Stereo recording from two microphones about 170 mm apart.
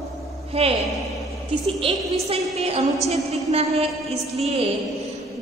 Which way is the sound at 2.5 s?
35° right (ahead or behind).